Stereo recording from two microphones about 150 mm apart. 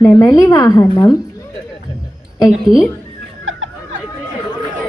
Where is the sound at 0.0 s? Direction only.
25° left (ahead or behind).